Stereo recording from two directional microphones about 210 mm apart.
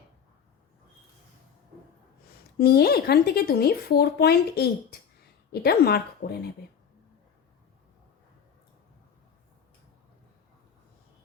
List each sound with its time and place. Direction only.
2.6 s speech: 50° left (ahead or behind)